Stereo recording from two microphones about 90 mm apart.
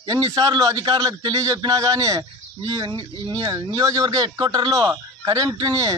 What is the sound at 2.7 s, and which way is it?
Speech, 55° right (ahead or behind).